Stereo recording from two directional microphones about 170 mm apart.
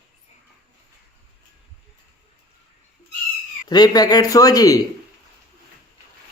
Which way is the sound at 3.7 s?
25° left (ahead or behind).